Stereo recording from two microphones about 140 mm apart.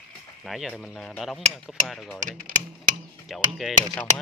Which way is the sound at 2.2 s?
70° right (ahead or behind).